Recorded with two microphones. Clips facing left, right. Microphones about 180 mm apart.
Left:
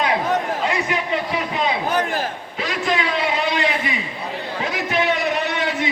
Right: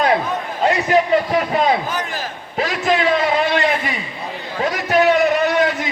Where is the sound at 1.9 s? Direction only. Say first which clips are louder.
Left 4 dB; 55° left (ahead or behind).